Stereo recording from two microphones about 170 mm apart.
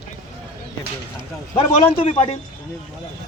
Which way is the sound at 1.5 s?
35° left (ahead or behind).